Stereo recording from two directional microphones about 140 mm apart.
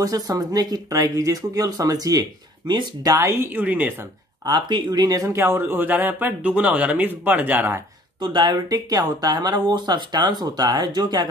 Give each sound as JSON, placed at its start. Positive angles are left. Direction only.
{"t": 0.0, "sound": "speech", "side_deg": -25}
{"t": 4.5, "sound": "speech", "side_deg": -30}
{"t": 8.2, "sound": "speech", "side_deg": -35}